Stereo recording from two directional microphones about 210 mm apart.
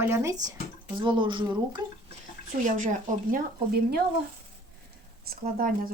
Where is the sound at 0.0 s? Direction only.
10° right (ahead or behind).